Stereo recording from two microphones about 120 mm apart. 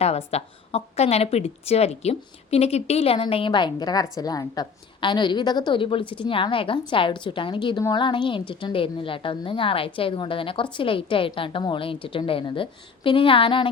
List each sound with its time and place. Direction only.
0.0 s a woman's voice: 60° left (ahead or behind)